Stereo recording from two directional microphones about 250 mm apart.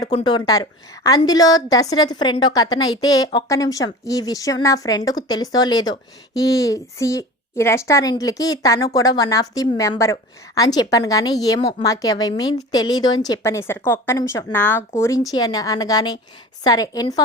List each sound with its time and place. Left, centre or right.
0.0 s a woman's voice: centre